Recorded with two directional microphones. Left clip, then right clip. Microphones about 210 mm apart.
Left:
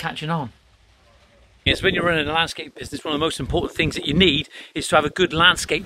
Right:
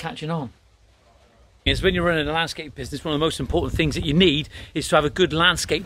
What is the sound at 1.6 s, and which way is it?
Speech, 10° right (ahead or behind).